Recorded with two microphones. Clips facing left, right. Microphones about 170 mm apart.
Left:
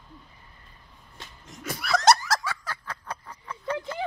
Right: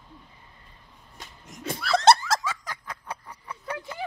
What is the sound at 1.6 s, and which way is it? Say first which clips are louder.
Giggle: right 2 dB; 25° right (ahead or behind).